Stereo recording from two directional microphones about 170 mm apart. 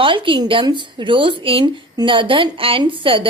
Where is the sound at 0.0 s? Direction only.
30° right (ahead or behind).